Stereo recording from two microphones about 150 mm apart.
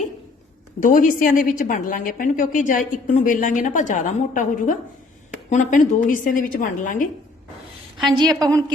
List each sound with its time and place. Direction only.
0.8 s a woman's voice: 65° left (ahead or behind)
8.1 s a woman's voice: 25° right (ahead or behind)